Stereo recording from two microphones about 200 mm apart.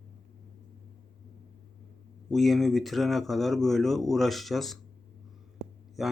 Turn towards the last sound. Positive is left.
turn(degrees=0)  # may be behind; listen again after turning